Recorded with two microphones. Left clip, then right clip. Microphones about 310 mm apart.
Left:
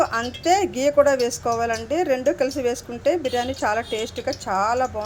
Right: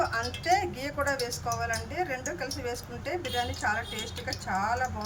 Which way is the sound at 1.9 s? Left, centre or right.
Centre.